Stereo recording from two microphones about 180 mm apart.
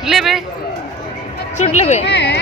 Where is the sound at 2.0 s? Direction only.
70° left (ahead or behind).